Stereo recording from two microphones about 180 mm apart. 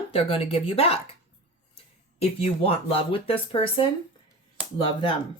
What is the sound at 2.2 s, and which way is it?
Speech, 35° left (ahead or behind).